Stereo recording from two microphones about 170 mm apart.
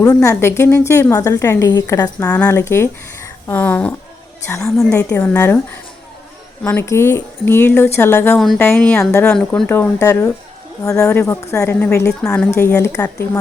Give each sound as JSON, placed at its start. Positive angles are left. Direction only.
{"t": 0.0, "sound": "a woman's voice", "side_deg": 20}
{"t": 2.2, "sound": "a woman's voice", "side_deg": 10}
{"t": 6.6, "sound": "a woman's voice", "side_deg": 10}